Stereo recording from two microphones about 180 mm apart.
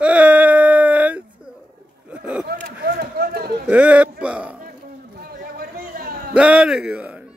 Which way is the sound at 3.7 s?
5° right (ahead or behind).